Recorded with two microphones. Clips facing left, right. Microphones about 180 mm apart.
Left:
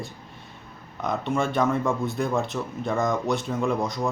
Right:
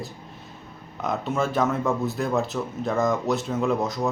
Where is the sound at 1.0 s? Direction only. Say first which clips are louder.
Even; 5° right (ahead or behind).